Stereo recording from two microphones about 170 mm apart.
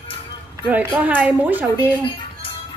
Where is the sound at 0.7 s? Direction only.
10° right (ahead or behind).